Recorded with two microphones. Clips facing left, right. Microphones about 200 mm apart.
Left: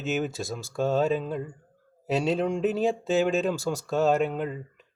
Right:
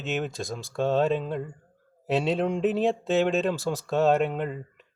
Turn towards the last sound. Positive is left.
turn(degrees=0)  # may be behind; listen again after turning